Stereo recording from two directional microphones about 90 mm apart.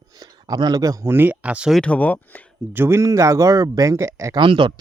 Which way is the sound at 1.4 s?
15° right (ahead or behind).